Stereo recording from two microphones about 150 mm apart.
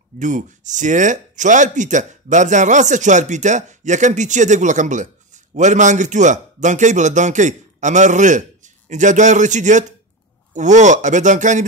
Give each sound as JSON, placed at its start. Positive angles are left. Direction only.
{"t": 0.2, "sound": "speech", "side_deg": -55}